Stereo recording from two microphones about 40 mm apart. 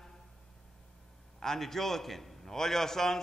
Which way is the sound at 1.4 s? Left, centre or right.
Centre.